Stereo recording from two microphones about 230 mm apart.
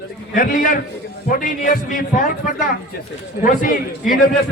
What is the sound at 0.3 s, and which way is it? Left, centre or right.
A man's voice, left.